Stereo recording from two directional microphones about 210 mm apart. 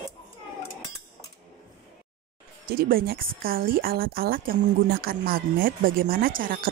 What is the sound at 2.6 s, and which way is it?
Speech, 45° right (ahead or behind).